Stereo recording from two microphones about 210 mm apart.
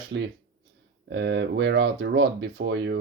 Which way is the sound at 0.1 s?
50° right (ahead or behind).